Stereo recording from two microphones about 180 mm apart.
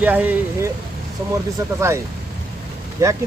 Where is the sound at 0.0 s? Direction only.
10° right (ahead or behind).